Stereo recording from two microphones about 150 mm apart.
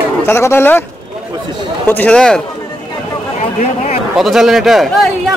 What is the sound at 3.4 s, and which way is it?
Speech, 50° left (ahead or behind).